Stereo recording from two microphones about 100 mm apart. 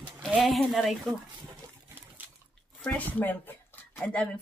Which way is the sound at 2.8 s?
15° left (ahead or behind).